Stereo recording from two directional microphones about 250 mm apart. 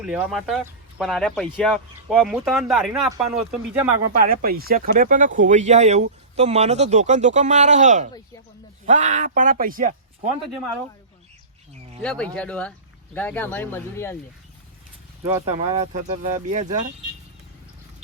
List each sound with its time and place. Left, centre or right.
0.0 s speech: centre
4.2 s speech: right
12.0 s speech: centre
15.2 s speech: centre
15.5 s speech: right